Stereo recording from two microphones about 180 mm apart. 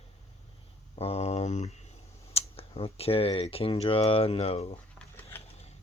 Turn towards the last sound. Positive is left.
turn(degrees=35)  # may be behind; listen again after turning